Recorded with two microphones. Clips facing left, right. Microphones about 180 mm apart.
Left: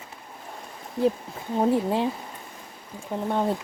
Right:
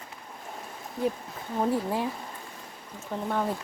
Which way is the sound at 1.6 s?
25° left (ahead or behind).